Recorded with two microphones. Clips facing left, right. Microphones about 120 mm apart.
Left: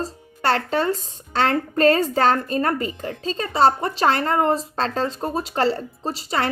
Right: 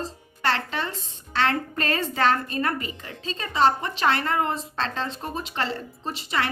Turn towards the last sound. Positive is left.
turn(degrees=35)  # may be behind; listen again after turning